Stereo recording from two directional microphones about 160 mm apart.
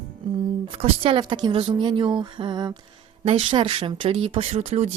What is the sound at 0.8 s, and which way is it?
A woman's voice, 30° right (ahead or behind).